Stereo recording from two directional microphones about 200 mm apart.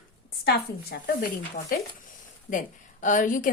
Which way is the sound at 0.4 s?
50° left (ahead or behind).